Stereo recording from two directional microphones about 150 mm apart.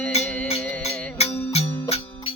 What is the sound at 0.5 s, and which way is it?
Music, 45° left (ahead or behind).